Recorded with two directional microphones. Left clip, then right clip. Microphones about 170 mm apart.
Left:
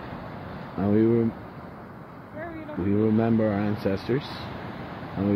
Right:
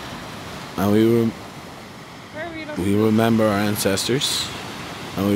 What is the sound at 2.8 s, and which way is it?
Speech, 30° right (ahead or behind).